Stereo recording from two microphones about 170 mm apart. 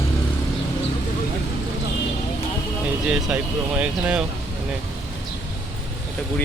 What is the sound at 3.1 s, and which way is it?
Speech, 5° right (ahead or behind).